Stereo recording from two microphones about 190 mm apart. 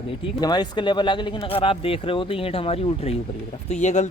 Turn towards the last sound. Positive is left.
turn(degrees=35)  # may be behind; listen again after turning